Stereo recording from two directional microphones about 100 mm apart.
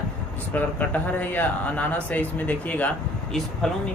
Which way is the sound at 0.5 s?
15° left (ahead or behind).